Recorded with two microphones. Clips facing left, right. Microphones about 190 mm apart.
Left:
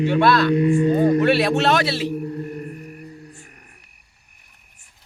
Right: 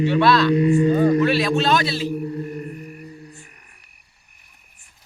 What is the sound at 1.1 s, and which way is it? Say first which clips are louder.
Speech: left 1 dB; 65° left (ahead or behind).